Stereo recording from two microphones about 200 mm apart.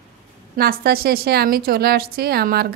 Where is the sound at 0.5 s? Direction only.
50° right (ahead or behind).